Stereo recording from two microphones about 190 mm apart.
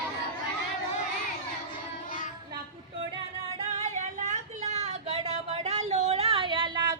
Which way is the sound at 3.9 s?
40° right (ahead or behind).